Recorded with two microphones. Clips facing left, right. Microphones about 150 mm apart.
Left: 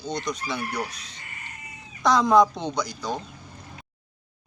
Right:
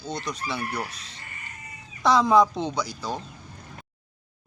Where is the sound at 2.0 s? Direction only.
5° right (ahead or behind).